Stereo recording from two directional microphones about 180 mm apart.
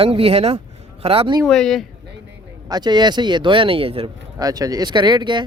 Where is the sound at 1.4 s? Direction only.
5° left (ahead or behind).